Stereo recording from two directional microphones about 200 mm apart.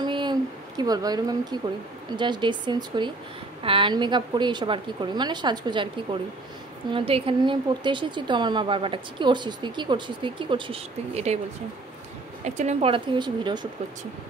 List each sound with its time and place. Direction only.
0.0 s a sound: 20° right (ahead or behind)
2.1 s speech: 25° right (ahead or behind)
12.4 s speech: 35° right (ahead or behind)